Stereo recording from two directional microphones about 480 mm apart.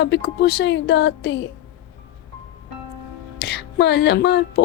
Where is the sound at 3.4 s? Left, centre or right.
Left.